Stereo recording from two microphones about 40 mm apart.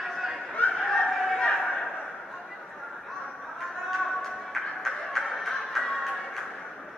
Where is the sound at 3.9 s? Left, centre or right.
Centre.